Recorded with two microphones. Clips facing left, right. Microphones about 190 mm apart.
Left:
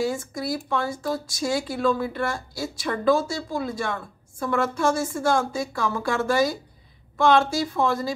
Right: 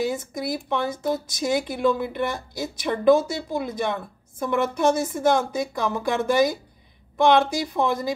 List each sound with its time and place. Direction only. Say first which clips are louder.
0.0 s a woman's voice: even; 20° right (ahead or behind)